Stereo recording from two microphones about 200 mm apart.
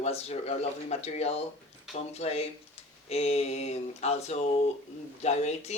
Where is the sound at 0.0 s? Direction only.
30° left (ahead or behind).